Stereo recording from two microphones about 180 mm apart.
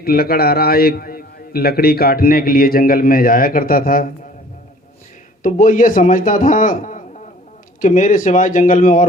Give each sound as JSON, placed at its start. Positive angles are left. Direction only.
{"t": 0.0, "sound": "a man's voice", "side_deg": 55}
{"t": 5.4, "sound": "a man's voice", "side_deg": 45}